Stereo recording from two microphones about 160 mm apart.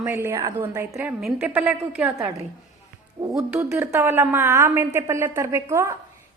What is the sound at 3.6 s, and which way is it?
A woman's voice, 15° right (ahead or behind).